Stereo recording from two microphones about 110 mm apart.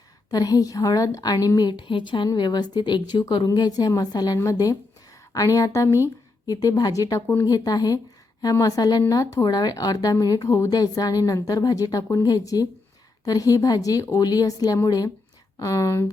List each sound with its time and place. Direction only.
0.3 s a woman's voice: 35° left (ahead or behind)